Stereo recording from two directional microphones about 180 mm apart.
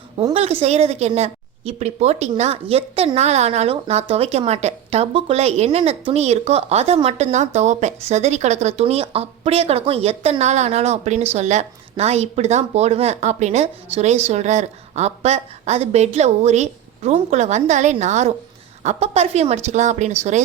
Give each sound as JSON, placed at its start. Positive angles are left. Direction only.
{"t": 0.6, "sound": "a woman's voice", "side_deg": -35}